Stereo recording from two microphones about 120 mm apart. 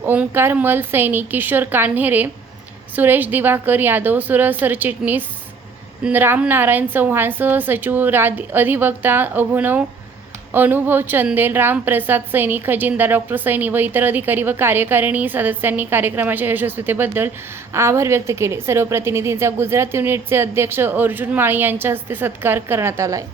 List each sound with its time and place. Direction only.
0.0 s a woman's voice: 15° right (ahead or behind)